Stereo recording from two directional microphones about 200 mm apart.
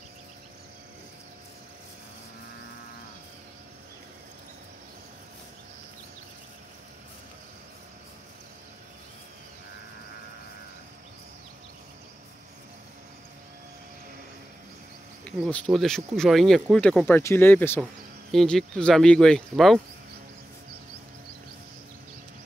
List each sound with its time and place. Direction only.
15.2 s speech: 5° left (ahead or behind)